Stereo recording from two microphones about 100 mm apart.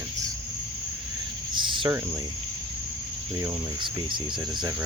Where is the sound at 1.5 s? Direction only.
55° right (ahead or behind).